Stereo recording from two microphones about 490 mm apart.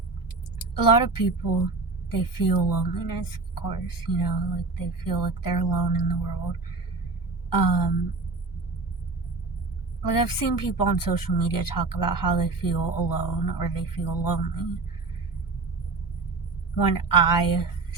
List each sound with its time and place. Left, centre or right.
0.6 s speech: left
7.5 s speech: left
10.0 s speech: left
16.7 s speech: left